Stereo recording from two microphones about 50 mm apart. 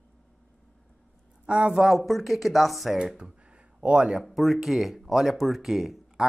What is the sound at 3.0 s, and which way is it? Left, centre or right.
Speech, centre.